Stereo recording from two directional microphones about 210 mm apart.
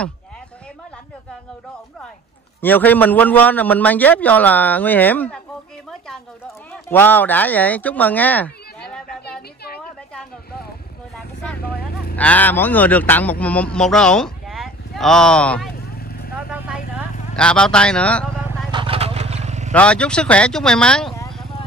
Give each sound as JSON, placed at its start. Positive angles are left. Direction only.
{"t": 2.6, "sound": "a man's voice", "side_deg": 10}
{"t": 5.9, "sound": "a sound", "side_deg": 0}
{"t": 6.4, "sound": "speech", "side_deg": 10}
{"t": 11.6, "sound": "vehicle", "side_deg": 45}
{"t": 12.2, "sound": "speech", "side_deg": 5}
{"t": 15.8, "sound": "vehicle", "side_deg": 45}
{"t": 16.3, "sound": "vehicle", "side_deg": -5}
{"t": 17.4, "sound": "speech", "side_deg": 5}
{"t": 18.7, "sound": "vehicle", "side_deg": -25}
{"t": 19.7, "sound": "speech", "side_deg": 5}